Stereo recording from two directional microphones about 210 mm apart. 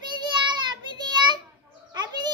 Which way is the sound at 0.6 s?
20° right (ahead or behind).